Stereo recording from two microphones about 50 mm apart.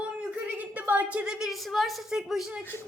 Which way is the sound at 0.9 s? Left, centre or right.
Right.